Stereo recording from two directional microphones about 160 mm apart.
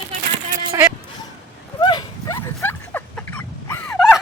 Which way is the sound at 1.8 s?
25° left (ahead or behind).